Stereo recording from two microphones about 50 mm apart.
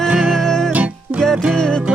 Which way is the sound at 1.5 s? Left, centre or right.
Centre.